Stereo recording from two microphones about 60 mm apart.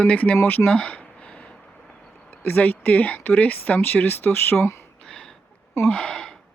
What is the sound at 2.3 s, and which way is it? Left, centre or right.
Speech, left.